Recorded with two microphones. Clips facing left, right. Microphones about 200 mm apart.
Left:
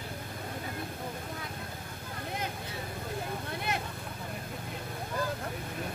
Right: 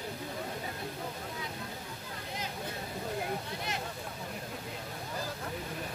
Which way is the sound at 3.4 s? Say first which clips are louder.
Left 3 dB; 55° left (ahead or behind).